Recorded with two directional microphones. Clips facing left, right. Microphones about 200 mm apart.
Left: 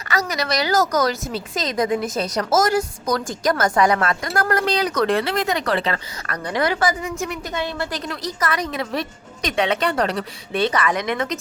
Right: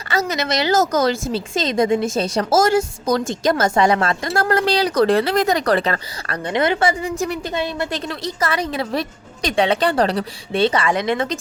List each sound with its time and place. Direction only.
0.1 s a woman's voice: 25° right (ahead or behind); by 6.0 s 45° right (ahead or behind)
6.2 s a woman's voice: 25° right (ahead or behind)